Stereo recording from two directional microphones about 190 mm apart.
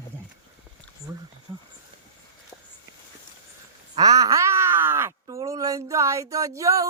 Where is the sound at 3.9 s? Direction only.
20° right (ahead or behind).